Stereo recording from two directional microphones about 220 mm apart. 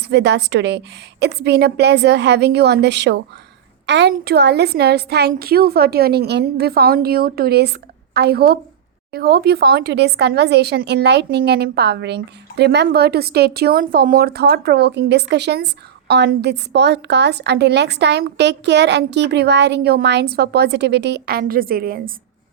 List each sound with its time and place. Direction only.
0.0 s speech: 50° right (ahead or behind)